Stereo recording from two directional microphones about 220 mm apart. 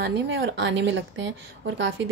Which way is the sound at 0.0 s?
50° right (ahead or behind).